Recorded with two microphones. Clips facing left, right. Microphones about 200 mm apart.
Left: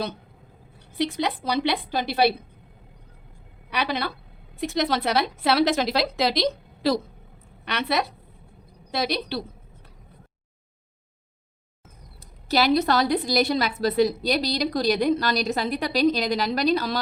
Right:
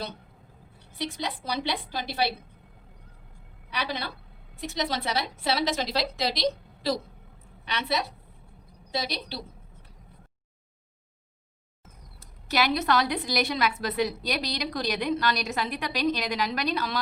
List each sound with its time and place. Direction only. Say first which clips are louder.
0.9 s a woman's voice: left 7 dB; 65° left (ahead or behind)
3.7 s a woman's voice: left 6 dB; 70° left (ahead or behind)
4.6 s a woman's voice: left 6 dB; 60° left (ahead or behind)
12.5 s a woman's voice: left 5 dB; 30° left (ahead or behind)